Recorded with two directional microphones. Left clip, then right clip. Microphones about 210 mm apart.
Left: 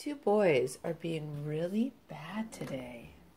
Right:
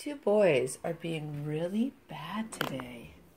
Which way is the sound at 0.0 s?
5° right (ahead or behind).